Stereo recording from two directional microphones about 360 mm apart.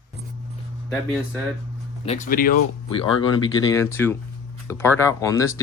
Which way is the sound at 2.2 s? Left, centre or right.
Left.